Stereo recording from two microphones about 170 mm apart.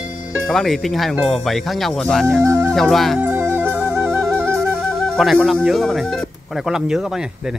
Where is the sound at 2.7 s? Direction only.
Centre (ahead or behind).